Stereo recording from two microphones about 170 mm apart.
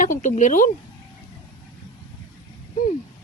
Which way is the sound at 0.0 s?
50° left (ahead or behind).